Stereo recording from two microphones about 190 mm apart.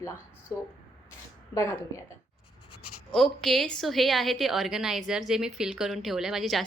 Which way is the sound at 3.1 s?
5° left (ahead or behind).